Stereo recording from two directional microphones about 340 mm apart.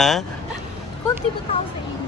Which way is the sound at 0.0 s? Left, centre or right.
Centre.